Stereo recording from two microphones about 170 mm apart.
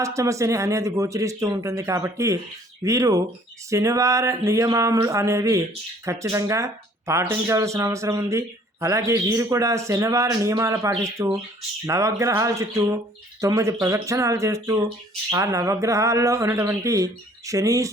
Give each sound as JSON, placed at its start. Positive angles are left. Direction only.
{"t": 0.0, "sound": "speech", "side_deg": -20}